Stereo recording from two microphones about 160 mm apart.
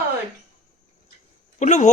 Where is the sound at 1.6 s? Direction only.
45° left (ahead or behind).